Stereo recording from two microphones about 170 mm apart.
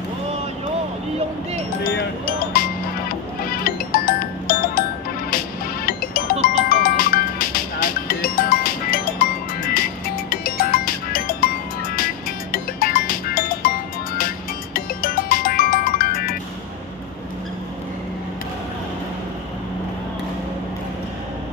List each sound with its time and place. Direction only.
1.9 s music: 60° left (ahead or behind)
5.9 s music: 60° left (ahead or behind)